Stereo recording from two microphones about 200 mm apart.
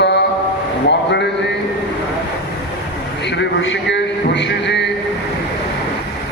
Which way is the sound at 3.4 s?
60° left (ahead or behind).